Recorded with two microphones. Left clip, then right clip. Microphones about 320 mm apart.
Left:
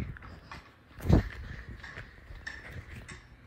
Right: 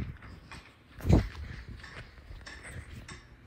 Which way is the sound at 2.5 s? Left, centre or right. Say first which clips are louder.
Even; left.